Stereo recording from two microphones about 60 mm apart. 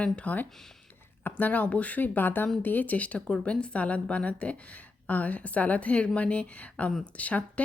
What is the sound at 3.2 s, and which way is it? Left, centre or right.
A woman's voice, centre.